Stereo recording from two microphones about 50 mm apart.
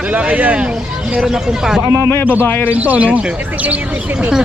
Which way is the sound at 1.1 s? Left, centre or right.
Centre.